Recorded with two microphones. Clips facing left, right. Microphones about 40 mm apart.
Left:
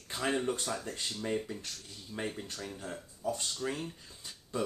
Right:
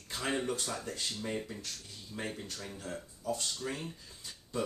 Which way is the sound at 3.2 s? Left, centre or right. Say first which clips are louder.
Left 1 dB; left.